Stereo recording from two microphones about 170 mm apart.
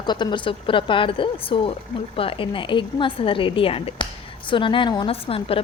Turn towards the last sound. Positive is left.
turn(degrees=35)  # may be behind; listen again after turning